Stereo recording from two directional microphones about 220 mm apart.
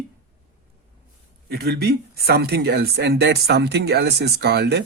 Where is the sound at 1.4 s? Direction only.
45° right (ahead or behind).